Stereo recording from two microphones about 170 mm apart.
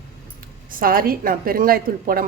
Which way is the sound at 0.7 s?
60° right (ahead or behind).